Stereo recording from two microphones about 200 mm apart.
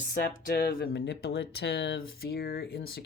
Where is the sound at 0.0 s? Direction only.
45° left (ahead or behind).